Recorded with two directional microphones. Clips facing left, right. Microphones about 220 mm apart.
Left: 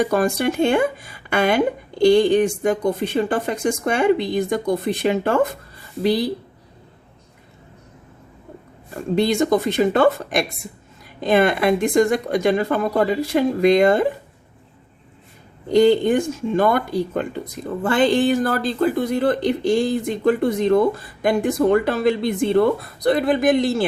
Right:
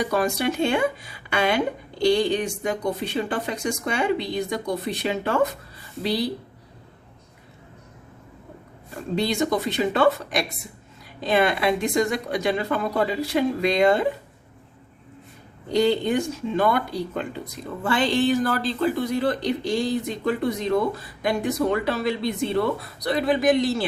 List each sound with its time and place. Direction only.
0.0 s speech: 50° left (ahead or behind)
9.1 s speech: 50° left (ahead or behind)
15.7 s speech: 50° left (ahead or behind)